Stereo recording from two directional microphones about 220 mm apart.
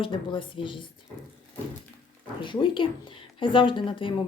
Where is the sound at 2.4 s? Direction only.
20° left (ahead or behind).